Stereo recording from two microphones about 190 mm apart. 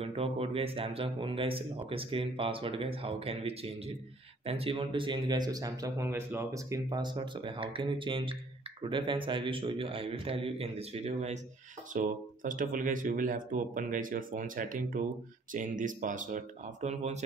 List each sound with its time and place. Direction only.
0.0 s speech: 30° right (ahead or behind)